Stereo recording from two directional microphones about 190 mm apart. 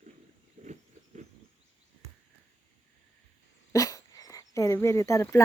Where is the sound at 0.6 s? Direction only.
40° right (ahead or behind).